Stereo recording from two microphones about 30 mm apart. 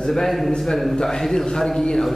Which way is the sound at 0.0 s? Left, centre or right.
Centre.